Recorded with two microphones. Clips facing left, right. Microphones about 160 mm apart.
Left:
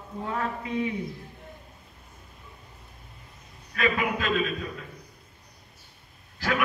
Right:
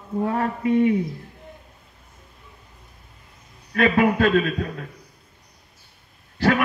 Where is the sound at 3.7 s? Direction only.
45° right (ahead or behind).